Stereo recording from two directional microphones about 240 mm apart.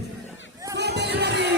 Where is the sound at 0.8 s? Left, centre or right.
Right.